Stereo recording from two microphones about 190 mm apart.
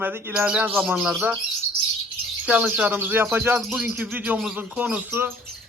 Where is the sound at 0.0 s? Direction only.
10° right (ahead or behind).